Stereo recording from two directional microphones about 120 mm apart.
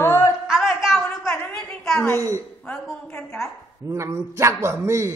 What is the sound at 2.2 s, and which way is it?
Speech, 25° right (ahead or behind).